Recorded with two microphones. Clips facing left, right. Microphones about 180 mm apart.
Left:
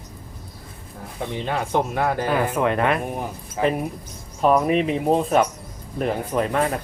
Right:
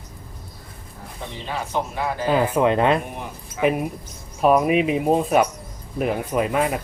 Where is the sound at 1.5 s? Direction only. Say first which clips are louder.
Left 3 dB; 55° left (ahead or behind).